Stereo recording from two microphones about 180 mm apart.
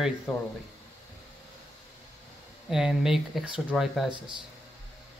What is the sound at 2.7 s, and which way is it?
Speech, 5° right (ahead or behind).